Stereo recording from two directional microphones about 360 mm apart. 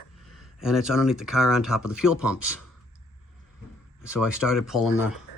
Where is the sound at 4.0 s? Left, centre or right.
Centre.